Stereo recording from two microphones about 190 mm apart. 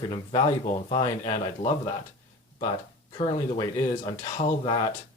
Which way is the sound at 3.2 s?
30° left (ahead or behind).